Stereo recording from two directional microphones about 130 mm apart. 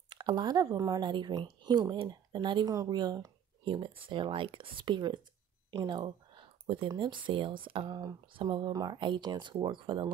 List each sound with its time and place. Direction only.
0.1 s speech: 35° right (ahead or behind)